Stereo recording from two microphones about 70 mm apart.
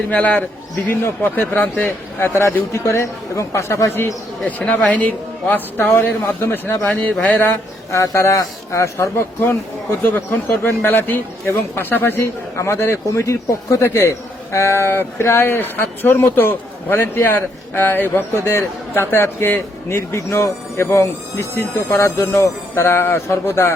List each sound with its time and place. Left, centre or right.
0.1 s a man's voice: centre
1.6 s a man's voice: centre
2.1 s speech: left
4.4 s a man's voice: centre
7.9 s speech: left
10.1 s speech: left